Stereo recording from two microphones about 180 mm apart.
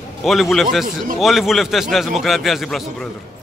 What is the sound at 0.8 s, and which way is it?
Speech, 50° right (ahead or behind).